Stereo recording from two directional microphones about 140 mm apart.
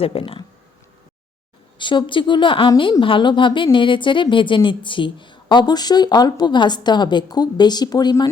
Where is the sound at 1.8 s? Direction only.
35° left (ahead or behind).